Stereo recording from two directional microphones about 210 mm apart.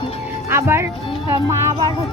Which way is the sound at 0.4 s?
10° right (ahead or behind).